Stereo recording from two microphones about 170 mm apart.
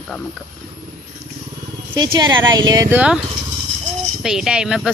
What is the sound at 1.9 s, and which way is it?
Speech, 25° right (ahead or behind).